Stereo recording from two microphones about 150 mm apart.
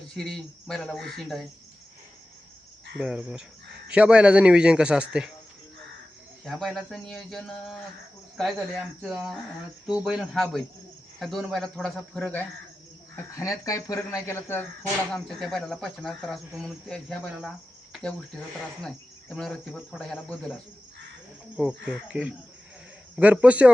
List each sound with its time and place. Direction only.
0.1 s speech: 5° left (ahead or behind)
3.0 s speech: 5° right (ahead or behind)
6.4 s speech: centre (ahead or behind)
13.3 s speech: 20° left (ahead or behind)
15.1 s speech: centre (ahead or behind)
18.8 s speech: 5° left (ahead or behind)